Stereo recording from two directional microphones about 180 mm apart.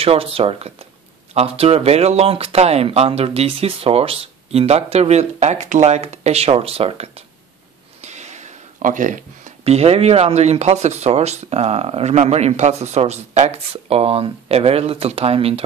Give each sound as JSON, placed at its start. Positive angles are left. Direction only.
{"t": 0.0, "sound": "speech", "side_deg": -30}